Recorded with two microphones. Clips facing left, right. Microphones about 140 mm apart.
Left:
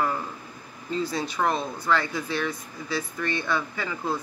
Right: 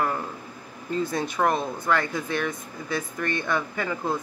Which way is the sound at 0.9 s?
50° right (ahead or behind).